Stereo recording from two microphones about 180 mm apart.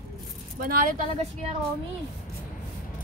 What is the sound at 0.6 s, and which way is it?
Speech, 55° right (ahead or behind).